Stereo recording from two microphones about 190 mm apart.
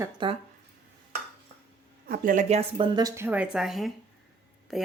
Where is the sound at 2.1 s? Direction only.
45° right (ahead or behind).